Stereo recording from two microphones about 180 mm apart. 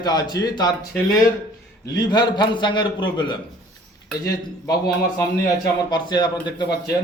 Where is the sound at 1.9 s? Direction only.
25° left (ahead or behind).